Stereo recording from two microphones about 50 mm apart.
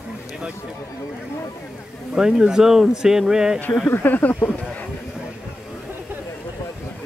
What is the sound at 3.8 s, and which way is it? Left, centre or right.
Speech, left.